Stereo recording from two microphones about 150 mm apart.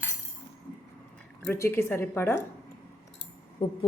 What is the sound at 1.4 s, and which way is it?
Speech, 15° left (ahead or behind).